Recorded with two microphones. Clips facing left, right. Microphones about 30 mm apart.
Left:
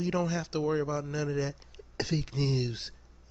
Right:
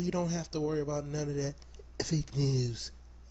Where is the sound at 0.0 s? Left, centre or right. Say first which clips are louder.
Left 3 dB; centre.